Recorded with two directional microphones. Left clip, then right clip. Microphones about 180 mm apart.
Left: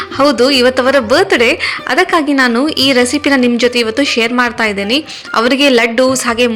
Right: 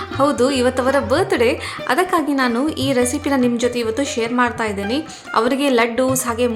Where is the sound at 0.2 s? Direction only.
20° left (ahead or behind).